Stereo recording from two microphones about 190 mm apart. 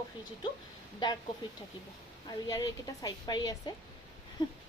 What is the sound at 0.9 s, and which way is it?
Speech, 20° left (ahead or behind).